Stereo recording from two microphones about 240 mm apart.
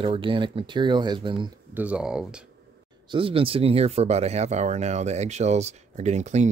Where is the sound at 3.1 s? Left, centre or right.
Right.